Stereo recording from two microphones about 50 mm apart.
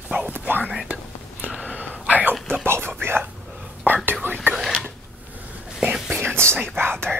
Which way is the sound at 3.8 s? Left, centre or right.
Right.